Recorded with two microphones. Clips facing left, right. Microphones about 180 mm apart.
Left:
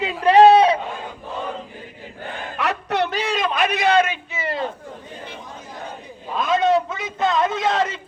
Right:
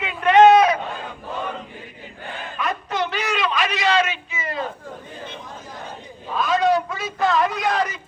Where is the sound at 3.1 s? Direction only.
30° left (ahead or behind).